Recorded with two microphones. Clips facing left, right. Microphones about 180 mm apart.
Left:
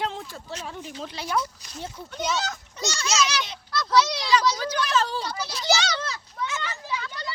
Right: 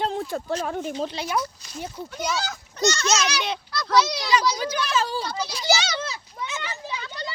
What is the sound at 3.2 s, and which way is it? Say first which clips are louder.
Speech: even; 65° right (ahead or behind).